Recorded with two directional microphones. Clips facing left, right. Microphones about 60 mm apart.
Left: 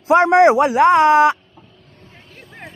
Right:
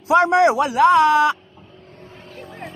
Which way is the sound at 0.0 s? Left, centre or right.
Left.